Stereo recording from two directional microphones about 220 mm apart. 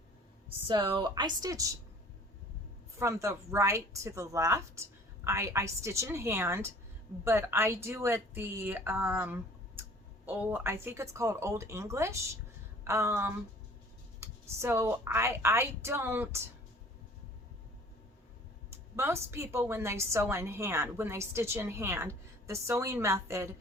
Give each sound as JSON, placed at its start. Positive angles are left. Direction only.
{"t": 0.7, "sound": "a woman's voice", "side_deg": -20}
{"t": 3.0, "sound": "a woman's voice", "side_deg": -15}
{"t": 18.7, "sound": "a woman's voice", "side_deg": -10}